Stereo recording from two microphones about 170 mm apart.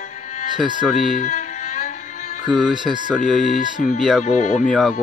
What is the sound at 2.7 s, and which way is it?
Speech, 25° right (ahead or behind).